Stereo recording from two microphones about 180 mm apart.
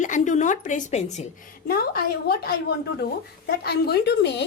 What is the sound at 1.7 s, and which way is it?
A woman's voice, 60° left (ahead or behind).